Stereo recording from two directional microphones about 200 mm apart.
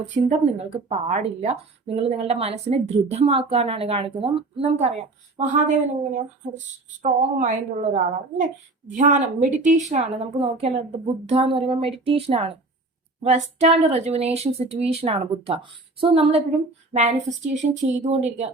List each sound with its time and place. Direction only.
0.3 s a woman's voice: 30° right (ahead or behind)